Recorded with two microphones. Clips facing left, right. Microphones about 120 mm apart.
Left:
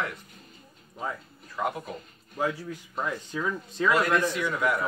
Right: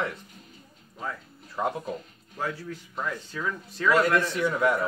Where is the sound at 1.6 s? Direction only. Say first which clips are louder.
Right 1 dB; 30° right (ahead or behind).